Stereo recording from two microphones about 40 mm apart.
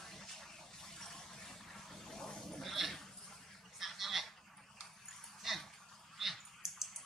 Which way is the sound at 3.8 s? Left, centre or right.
Centre.